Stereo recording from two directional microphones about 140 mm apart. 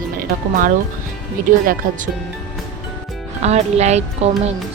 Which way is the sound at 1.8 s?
75° right (ahead or behind).